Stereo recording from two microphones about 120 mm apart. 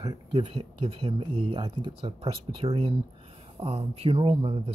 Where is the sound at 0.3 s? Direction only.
50° right (ahead or behind).